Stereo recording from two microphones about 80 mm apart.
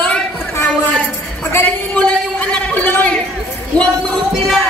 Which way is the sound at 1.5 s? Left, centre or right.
Left.